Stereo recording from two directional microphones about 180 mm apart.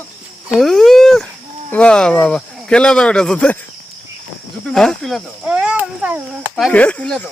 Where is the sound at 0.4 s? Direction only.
Centre (ahead or behind).